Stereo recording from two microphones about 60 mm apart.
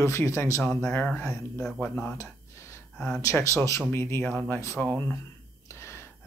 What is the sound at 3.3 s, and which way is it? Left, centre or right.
Speech, left.